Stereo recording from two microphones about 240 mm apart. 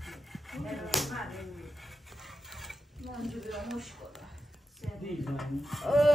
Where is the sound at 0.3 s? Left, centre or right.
Centre.